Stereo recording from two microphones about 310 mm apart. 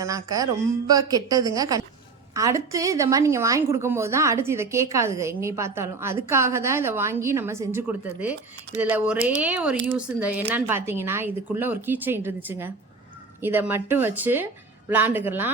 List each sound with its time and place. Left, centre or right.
0.0 s a woman's voice: centre